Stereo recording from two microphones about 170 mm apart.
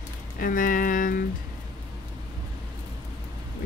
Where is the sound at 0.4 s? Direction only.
55° left (ahead or behind).